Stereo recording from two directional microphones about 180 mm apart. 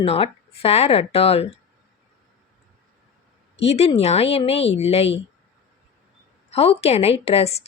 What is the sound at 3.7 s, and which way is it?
A woman's voice, 35° left (ahead or behind).